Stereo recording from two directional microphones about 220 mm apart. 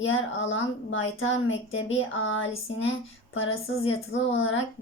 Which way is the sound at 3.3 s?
65° left (ahead or behind).